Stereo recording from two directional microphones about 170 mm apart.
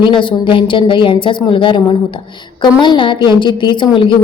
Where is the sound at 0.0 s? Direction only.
30° left (ahead or behind).